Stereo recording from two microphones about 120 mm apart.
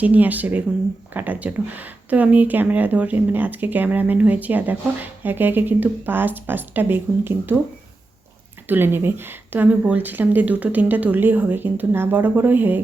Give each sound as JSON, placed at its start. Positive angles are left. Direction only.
{"t": 0.0, "sound": "a woman's voice", "side_deg": -15}
{"t": 8.6, "sound": "a woman's voice", "side_deg": -15}